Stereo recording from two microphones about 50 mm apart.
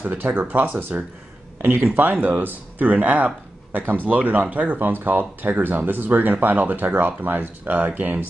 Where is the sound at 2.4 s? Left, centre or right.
Right.